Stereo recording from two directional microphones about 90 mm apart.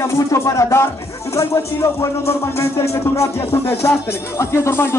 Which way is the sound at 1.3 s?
30° left (ahead or behind).